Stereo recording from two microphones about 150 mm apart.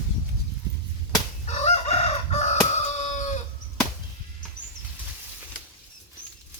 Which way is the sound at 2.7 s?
50° left (ahead or behind).